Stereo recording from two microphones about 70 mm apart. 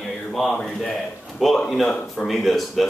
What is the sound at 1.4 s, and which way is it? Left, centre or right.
A woman's voice, centre.